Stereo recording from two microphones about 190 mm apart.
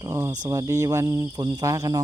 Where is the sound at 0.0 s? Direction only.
15° right (ahead or behind).